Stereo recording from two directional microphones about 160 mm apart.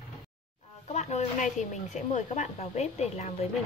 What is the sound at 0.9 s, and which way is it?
Speech, 45° left (ahead or behind).